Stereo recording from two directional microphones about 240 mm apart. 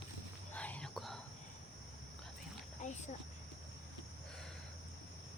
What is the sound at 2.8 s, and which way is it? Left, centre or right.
Cricket, left.